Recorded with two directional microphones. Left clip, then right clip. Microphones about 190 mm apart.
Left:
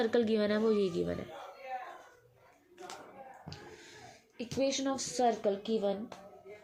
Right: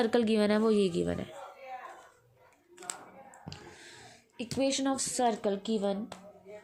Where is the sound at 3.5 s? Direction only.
50° right (ahead or behind).